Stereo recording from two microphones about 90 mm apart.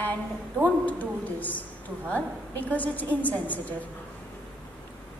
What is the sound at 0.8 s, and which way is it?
A woman's voice, 15° left (ahead or behind).